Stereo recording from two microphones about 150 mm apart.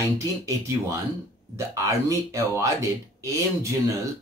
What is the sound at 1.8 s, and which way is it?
Speech, 20° right (ahead or behind).